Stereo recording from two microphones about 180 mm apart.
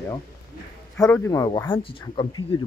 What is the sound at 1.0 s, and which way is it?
Speech, 15° left (ahead or behind).